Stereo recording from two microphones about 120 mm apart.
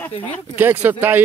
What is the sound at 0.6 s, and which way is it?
Speech, 15° right (ahead or behind).